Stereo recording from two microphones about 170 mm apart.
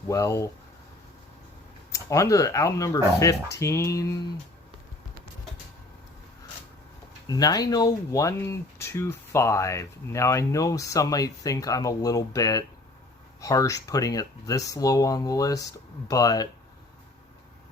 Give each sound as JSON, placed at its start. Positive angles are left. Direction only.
{"t": 0.1, "sound": "speech", "side_deg": 20}
{"t": 1.9, "sound": "speech", "side_deg": 20}
{"t": 7.3, "sound": "speech", "side_deg": 20}